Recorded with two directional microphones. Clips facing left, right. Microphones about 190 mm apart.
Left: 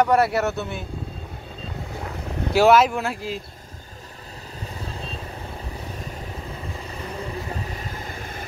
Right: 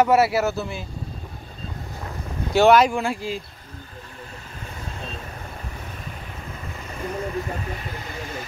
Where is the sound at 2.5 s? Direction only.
5° left (ahead or behind).